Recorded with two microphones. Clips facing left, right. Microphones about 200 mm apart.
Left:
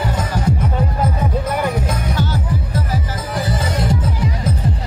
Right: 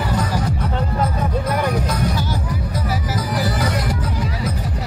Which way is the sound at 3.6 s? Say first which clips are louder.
Left 2 dB; 25° left (ahead or behind).